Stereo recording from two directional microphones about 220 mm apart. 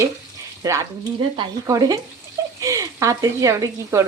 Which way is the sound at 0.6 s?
15° right (ahead or behind).